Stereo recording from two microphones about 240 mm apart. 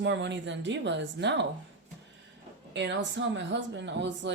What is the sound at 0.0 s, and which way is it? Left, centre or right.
Speech, right.